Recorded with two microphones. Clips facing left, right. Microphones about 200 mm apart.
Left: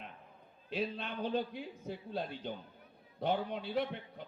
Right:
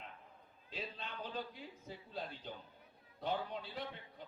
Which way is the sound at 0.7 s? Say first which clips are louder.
Left 9 dB; 70° left (ahead or behind).